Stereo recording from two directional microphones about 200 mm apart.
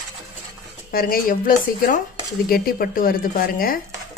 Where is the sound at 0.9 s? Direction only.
45° left (ahead or behind).